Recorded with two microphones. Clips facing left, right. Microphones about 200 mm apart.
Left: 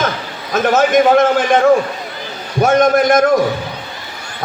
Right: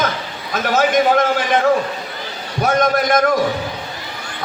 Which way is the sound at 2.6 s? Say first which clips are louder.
Left 5 dB; 50° left (ahead or behind).